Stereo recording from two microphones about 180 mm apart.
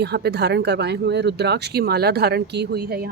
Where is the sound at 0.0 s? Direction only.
65° right (ahead or behind).